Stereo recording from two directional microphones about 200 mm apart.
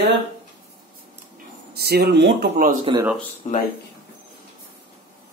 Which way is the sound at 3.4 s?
30° left (ahead or behind).